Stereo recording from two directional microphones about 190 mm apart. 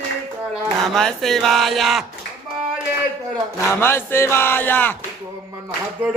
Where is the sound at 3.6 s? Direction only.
15° left (ahead or behind).